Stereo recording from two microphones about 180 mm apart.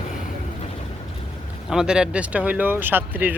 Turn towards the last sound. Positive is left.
turn(degrees=-10)  # may be behind; listen again after turning